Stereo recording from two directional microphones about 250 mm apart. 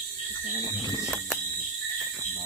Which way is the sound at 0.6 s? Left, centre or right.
Centre.